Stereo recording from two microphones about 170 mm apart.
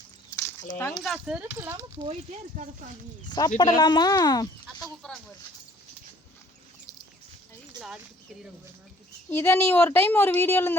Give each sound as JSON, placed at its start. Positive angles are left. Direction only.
{"t": 0.3, "sound": "a sound", "side_deg": 15}
{"t": 0.9, "sound": "speech", "side_deg": 0}
{"t": 3.2, "sound": "speech", "side_deg": 25}
{"t": 5.0, "sound": "speech", "side_deg": 5}
{"t": 9.3, "sound": "a woman's voice", "side_deg": 15}